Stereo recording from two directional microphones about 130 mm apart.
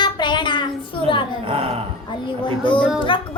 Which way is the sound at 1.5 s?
50° right (ahead or behind).